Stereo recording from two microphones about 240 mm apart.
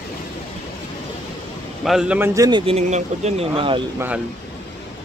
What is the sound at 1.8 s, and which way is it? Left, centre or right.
A man's voice, centre.